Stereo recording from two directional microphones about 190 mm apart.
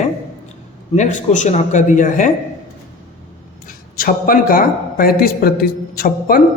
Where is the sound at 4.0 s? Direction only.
50° left (ahead or behind).